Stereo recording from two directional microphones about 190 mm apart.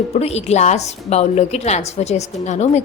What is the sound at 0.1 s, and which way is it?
A woman's voice, 35° left (ahead or behind).